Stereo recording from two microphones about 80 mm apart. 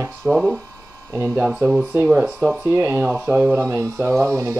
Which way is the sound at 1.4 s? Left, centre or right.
Centre.